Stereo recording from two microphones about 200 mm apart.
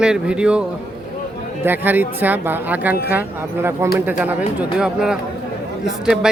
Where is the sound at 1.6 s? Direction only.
10° right (ahead or behind).